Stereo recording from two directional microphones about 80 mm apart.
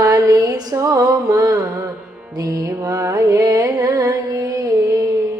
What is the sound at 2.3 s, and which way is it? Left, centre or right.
Music, right.